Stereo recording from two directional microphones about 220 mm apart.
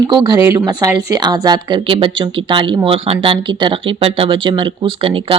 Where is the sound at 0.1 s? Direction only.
20° right (ahead or behind).